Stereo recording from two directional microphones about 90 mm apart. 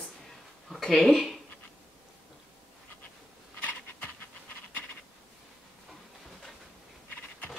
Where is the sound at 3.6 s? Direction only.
15° left (ahead or behind).